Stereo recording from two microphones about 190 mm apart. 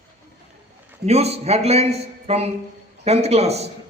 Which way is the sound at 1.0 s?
35° right (ahead or behind).